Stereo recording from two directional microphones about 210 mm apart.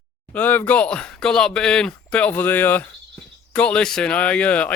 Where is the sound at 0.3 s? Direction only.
10° left (ahead or behind).